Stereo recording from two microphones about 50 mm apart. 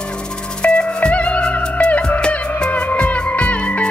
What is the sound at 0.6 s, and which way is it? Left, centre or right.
Music, centre.